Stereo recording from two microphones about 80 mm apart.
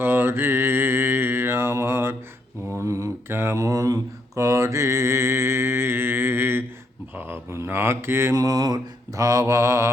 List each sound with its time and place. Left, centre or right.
0.0 s mantra: right
8.4 s mantra: right